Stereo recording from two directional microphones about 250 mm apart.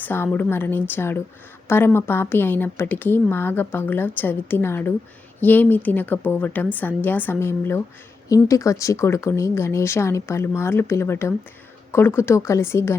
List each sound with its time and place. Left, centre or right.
0.0 s speech: centre